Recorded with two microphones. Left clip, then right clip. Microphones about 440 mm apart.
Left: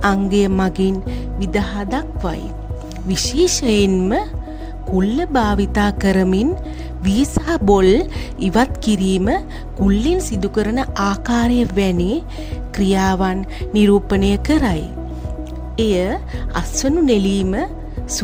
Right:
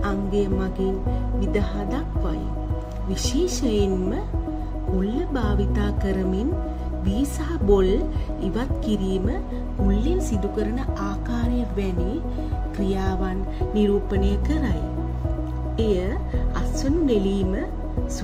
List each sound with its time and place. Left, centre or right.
0.0 s speech: left
15.8 s speech: left